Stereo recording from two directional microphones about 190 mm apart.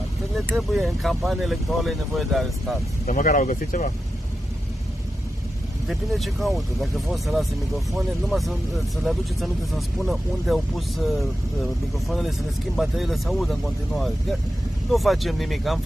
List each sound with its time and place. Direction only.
0.5 s speech: centre (ahead or behind)
3.1 s speech: 45° left (ahead or behind)
5.9 s speech: centre (ahead or behind)